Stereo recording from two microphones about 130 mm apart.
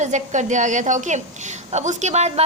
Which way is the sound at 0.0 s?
65° right (ahead or behind).